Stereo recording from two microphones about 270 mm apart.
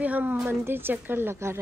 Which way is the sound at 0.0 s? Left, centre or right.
Centre.